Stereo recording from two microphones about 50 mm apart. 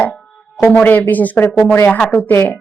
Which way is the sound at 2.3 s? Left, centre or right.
Left.